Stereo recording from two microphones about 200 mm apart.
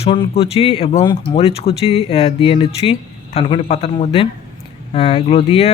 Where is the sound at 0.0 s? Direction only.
25° left (ahead or behind).